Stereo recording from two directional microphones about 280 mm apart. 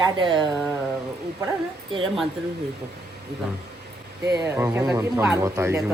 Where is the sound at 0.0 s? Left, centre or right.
Centre.